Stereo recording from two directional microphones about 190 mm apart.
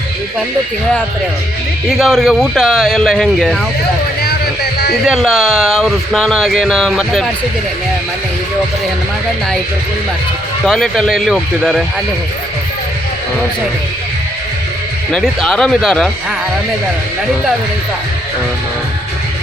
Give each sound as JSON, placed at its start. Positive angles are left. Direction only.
{"t": 1.9, "sound": "speech", "side_deg": 0}
{"t": 4.2, "sound": "music", "side_deg": 55}
{"t": 5.0, "sound": "speech", "side_deg": 0}
{"t": 10.6, "sound": "speech", "side_deg": 0}
{"t": 15.1, "sound": "speech", "side_deg": 0}